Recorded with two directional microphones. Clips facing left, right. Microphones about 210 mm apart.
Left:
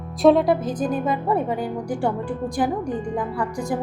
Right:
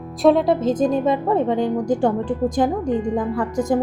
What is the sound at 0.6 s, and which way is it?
A woman's voice, 25° right (ahead or behind).